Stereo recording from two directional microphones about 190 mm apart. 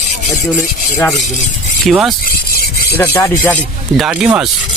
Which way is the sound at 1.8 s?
Centre (ahead or behind).